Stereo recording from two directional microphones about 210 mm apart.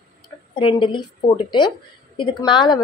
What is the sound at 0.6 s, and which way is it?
Speech, 25° left (ahead or behind).